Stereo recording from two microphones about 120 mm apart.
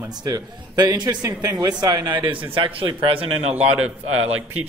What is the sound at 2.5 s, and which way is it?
A man's voice, 45° right (ahead or behind).